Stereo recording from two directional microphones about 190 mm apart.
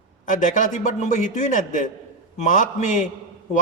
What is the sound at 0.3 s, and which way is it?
A man's voice, 40° left (ahead or behind).